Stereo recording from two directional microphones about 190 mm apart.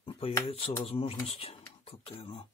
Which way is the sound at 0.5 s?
30° left (ahead or behind).